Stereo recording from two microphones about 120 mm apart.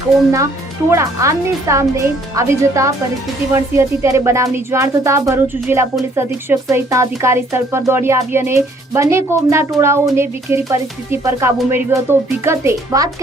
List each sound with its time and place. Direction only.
0.9 s speech: 25° right (ahead or behind)